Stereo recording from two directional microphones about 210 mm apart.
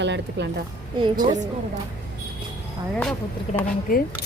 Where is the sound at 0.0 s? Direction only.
55° right (ahead or behind).